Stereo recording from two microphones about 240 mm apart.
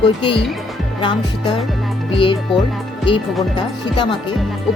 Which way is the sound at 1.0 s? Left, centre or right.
Centre.